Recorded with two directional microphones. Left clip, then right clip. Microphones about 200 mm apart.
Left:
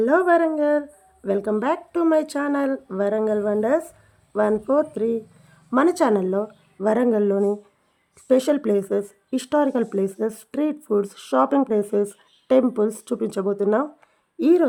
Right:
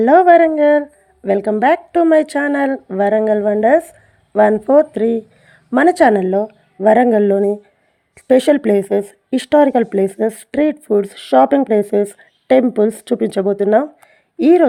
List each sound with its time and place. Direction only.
0.0 s speech: 25° right (ahead or behind)